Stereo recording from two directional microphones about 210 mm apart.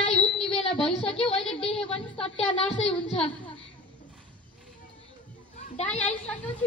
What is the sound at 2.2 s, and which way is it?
A woman's voice, 30° left (ahead or behind).